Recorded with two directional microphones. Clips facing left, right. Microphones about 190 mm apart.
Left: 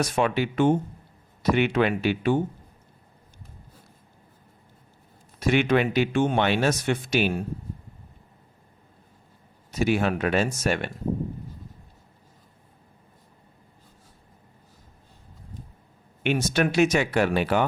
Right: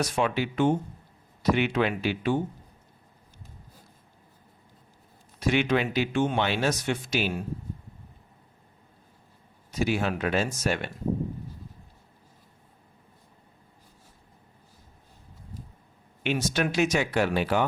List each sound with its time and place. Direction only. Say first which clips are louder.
0.2 s speech: left 3 dB; 55° left (ahead or behind)
5.4 s speech: left 3 dB; 55° left (ahead or behind)
9.8 s speech: left 3 dB; 55° left (ahead or behind)
16.2 s speech: left 3 dB; 55° left (ahead or behind)